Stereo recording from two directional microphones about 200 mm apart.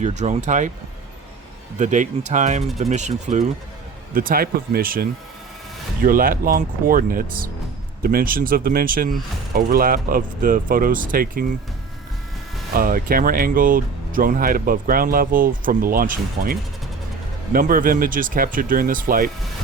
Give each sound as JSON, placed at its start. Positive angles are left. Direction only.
{"t": 0.0, "sound": "speech", "side_deg": -35}
{"t": 1.8, "sound": "speech", "side_deg": -40}
{"t": 12.7, "sound": "speech", "side_deg": -45}